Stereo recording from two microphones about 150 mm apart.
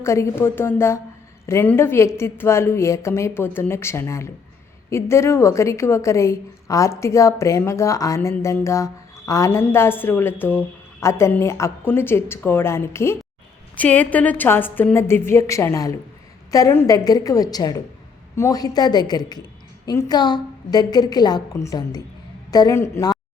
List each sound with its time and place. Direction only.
0.0 s a woman's voice: 20° left (ahead or behind)